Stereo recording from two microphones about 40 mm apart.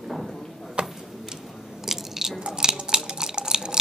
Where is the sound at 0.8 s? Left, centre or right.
Right.